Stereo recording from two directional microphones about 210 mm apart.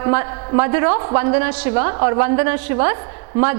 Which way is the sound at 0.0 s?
15° right (ahead or behind).